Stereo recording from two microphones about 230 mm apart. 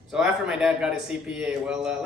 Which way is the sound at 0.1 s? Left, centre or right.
Centre.